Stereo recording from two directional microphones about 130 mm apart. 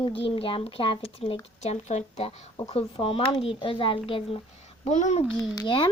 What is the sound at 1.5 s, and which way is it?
Speech, 60° left (ahead or behind).